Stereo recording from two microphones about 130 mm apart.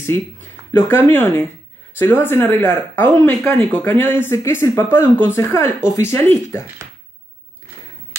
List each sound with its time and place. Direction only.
0.0 s a woman's voice: 15° left (ahead or behind)